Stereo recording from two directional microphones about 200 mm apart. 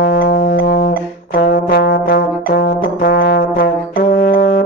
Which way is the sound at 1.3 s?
50° left (ahead or behind).